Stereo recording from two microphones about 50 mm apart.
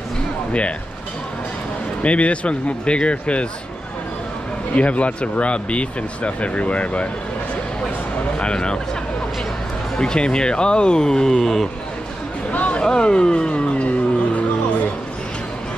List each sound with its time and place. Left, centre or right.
0.5 s speech: left
2.0 s speech: left
4.7 s speech: left
8.4 s speech: centre
9.9 s speech: centre
12.5 s a sound: left